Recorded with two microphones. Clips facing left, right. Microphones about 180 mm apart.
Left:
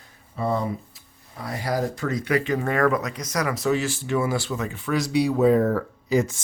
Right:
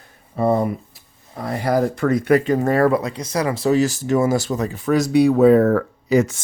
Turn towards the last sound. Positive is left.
turn(degrees=-70)  # may be behind; listen again after turning